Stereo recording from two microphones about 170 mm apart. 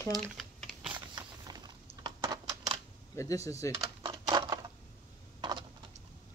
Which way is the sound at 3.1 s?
20° left (ahead or behind).